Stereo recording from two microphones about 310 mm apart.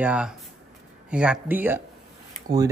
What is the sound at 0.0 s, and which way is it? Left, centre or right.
Speech, centre.